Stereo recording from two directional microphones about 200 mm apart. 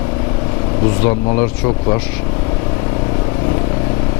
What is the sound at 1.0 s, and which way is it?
Speech, 10° left (ahead or behind).